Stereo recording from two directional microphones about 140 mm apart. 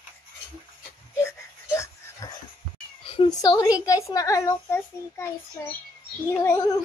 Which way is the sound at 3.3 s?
25° left (ahead or behind).